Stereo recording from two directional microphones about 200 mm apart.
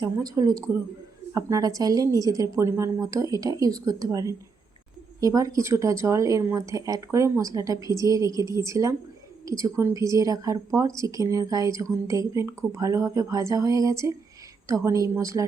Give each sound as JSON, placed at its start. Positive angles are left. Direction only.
{"t": 0.0, "sound": "speech", "side_deg": -20}